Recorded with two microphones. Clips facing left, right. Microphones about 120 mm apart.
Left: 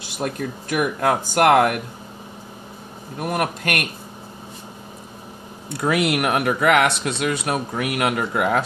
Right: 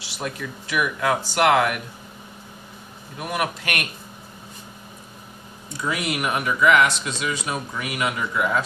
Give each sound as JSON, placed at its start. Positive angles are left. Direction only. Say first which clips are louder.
{"t": 0.0, "sound": "speech", "louder": "left 5 dB", "side_deg": 45}
{"t": 3.2, "sound": "speech", "louder": "left 3 dB", "side_deg": 45}
{"t": 5.7, "sound": "speech", "louder": "left 6 dB", "side_deg": 65}